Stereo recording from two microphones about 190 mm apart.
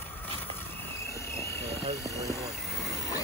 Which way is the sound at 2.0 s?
15° left (ahead or behind).